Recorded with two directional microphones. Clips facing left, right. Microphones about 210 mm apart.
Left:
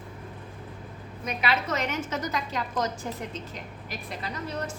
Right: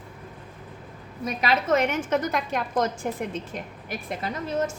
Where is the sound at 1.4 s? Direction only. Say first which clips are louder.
Right 6 dB; 45° right (ahead or behind).